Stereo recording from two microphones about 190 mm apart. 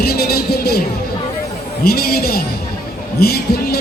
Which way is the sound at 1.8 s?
55° left (ahead or behind).